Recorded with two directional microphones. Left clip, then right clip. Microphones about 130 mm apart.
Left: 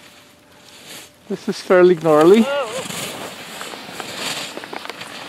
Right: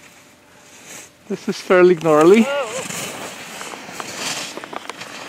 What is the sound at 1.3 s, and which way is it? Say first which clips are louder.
Speech: left 1 dB; 25° right (ahead or behind).